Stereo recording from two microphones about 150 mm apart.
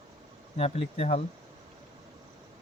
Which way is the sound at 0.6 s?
40° left (ahead or behind).